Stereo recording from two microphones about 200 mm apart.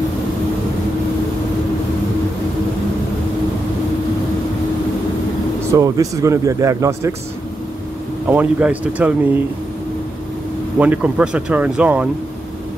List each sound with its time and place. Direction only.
5.7 s speech: 15° right (ahead or behind)
8.3 s speech: 5° right (ahead or behind)
10.8 s speech: 5° right (ahead or behind)